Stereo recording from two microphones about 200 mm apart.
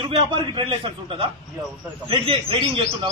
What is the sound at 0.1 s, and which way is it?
A man's voice, 25° right (ahead or behind).